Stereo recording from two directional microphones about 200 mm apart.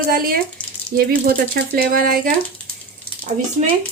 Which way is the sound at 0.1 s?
45° right (ahead or behind).